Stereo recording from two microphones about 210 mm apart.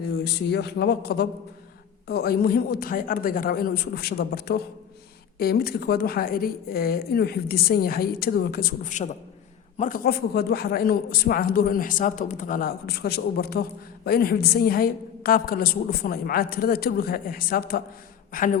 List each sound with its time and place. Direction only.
0.5 s a man's voice: 50° left (ahead or behind)